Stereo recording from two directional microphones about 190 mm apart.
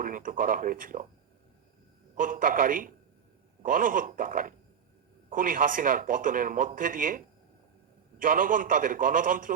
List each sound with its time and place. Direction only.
0.0 s speech: 45° right (ahead or behind)
2.1 s speech: 45° right (ahead or behind)
8.2 s speech: 45° right (ahead or behind)